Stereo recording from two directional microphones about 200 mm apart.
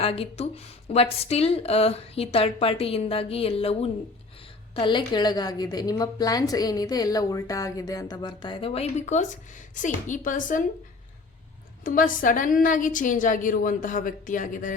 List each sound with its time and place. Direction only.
0.0 s a woman's voice: 30° left (ahead or behind)
11.8 s a woman's voice: 45° left (ahead or behind)